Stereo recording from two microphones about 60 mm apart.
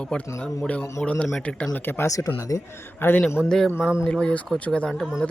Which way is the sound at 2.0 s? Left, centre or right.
Left.